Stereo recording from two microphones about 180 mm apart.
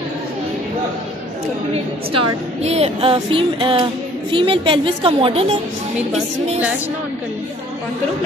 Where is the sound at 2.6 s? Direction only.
35° right (ahead or behind).